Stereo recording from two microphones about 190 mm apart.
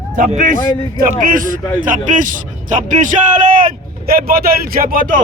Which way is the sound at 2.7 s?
40° right (ahead or behind).